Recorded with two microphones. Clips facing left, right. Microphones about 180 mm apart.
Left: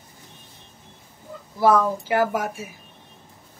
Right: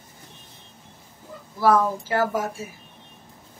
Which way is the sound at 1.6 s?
20° left (ahead or behind).